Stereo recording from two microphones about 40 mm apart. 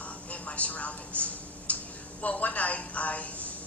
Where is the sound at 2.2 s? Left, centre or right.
Left.